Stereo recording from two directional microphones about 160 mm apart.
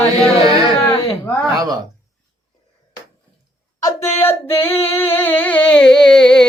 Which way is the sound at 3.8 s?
15° left (ahead or behind).